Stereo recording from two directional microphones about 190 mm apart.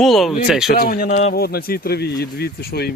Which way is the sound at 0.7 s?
50° left (ahead or behind).